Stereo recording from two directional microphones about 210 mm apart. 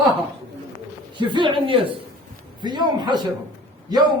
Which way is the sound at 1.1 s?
20° right (ahead or behind).